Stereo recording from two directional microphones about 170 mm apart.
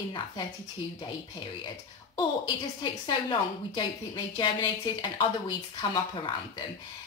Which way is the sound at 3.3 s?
25° left (ahead or behind).